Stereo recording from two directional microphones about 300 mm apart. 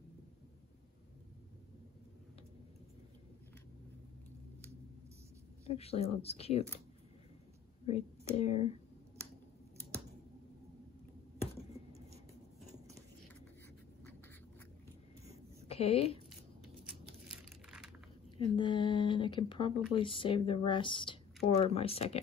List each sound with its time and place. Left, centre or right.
5.7 s a woman's voice: centre
7.8 s speech: left
15.7 s speech: centre
17.3 s a sound: centre
18.4 s a woman's voice: centre